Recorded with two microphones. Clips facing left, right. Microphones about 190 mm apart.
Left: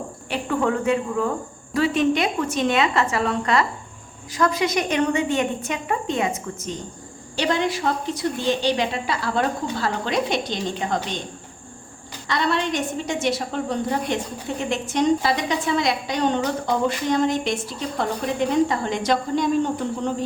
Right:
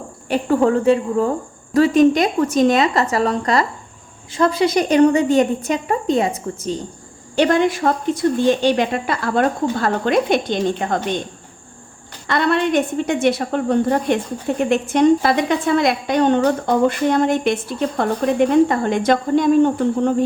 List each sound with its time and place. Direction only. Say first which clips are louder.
0.3 s a woman's voice: right 7 dB; 40° right (ahead or behind)
7.3 s a woman's voice: right 7 dB; 55° right (ahead or behind)
12.3 s a woman's voice: right 6 dB; 55° right (ahead or behind)